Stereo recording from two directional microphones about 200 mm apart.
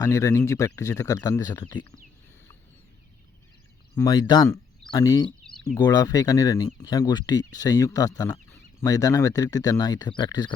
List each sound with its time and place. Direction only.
0.0 s speech: 15° left (ahead or behind)
3.9 s speech: 20° left (ahead or behind)